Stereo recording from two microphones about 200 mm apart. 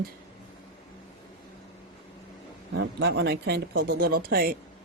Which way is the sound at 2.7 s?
55° right (ahead or behind).